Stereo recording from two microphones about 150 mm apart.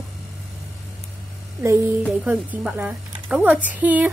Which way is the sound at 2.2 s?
10° right (ahead or behind).